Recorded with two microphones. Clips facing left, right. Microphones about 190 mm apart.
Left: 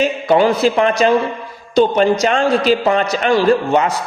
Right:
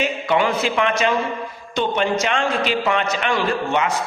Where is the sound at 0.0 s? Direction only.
35° left (ahead or behind).